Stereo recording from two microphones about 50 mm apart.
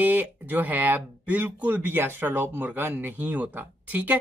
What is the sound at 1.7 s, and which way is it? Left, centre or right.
Speech, right.